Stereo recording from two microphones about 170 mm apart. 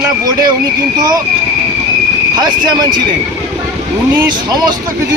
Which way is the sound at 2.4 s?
25° right (ahead or behind).